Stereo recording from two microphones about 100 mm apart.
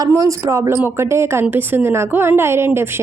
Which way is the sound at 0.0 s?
35° right (ahead or behind).